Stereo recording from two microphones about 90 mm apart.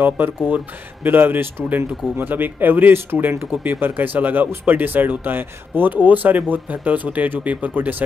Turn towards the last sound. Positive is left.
turn(degrees=-15)  # may be behind; listen again after turning